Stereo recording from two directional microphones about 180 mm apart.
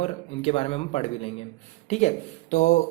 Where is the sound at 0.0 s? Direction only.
35° left (ahead or behind).